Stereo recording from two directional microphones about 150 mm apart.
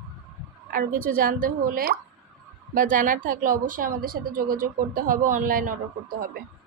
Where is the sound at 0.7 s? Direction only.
70° right (ahead or behind).